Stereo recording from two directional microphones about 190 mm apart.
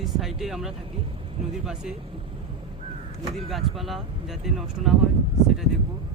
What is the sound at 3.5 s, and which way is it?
Speech, centre (ahead or behind).